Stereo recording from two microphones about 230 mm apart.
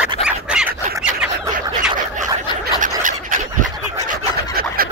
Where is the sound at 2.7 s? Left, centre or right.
Right.